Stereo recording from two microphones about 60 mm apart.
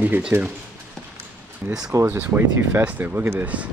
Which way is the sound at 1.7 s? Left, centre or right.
Right.